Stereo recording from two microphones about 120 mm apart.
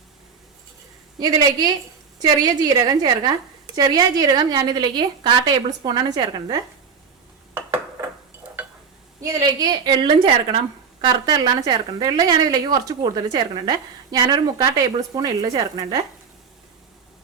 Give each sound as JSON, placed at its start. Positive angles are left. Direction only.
{"t": 1.2, "sound": "a woman's voice", "side_deg": -35}
{"t": 8.6, "sound": "stir", "side_deg": -15}
{"t": 9.2, "sound": "a woman's voice", "side_deg": -35}